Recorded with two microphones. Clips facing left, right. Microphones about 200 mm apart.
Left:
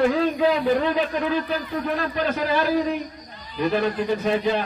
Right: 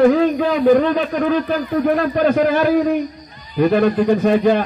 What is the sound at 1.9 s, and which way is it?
A man's voice, 55° right (ahead or behind).